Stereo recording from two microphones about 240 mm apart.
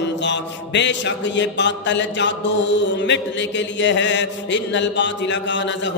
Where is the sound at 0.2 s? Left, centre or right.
Left.